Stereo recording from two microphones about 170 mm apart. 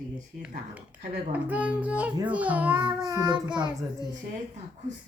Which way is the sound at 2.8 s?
20° right (ahead or behind).